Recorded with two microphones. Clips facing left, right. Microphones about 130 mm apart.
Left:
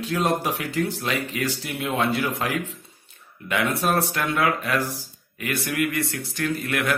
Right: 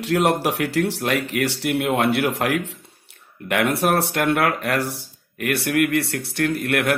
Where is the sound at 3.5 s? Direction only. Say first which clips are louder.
Right 4 dB; 70° right (ahead or behind).